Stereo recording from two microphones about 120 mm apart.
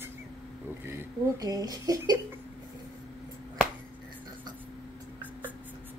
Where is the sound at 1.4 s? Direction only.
30° right (ahead or behind).